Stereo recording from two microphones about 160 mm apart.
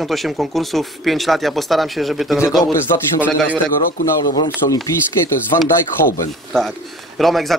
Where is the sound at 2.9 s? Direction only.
20° left (ahead or behind).